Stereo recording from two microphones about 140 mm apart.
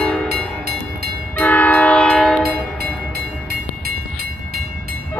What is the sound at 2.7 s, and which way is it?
Train, 90° right.